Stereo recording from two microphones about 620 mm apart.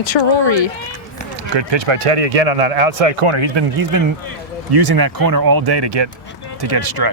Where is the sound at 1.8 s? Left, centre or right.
Right.